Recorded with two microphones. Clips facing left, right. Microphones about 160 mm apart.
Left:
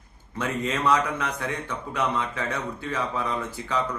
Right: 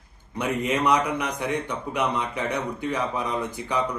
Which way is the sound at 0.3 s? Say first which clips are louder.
Right 3 dB; 15° right (ahead or behind).